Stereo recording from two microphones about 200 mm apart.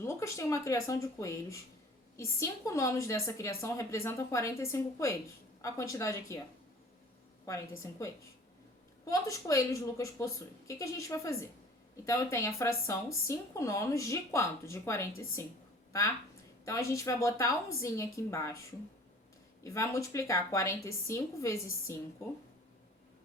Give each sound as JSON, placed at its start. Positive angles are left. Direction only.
{"t": 0.0, "sound": "speech", "side_deg": 15}
{"t": 7.8, "sound": "a woman's voice", "side_deg": 15}
{"t": 19.6, "sound": "speech", "side_deg": 15}